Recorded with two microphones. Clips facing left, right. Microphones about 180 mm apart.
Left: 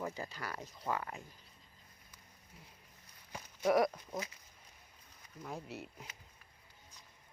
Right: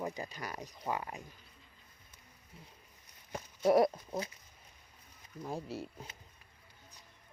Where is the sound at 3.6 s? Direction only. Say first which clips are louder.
Right 4 dB; 25° right (ahead or behind).